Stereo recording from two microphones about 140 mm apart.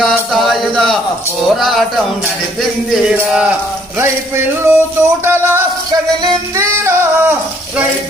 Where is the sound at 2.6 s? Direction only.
5° right (ahead or behind).